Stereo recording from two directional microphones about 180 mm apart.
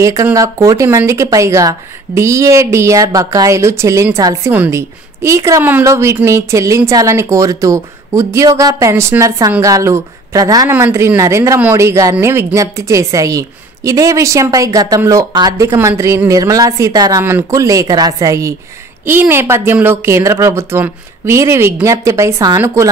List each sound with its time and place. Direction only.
0.0 s speech: 15° right (ahead or behind)